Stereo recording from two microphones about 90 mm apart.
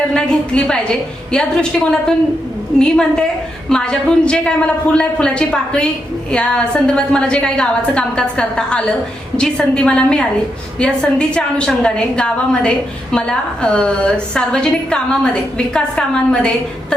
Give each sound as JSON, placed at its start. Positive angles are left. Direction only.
{"t": 0.1, "sound": "a woman's voice", "side_deg": 10}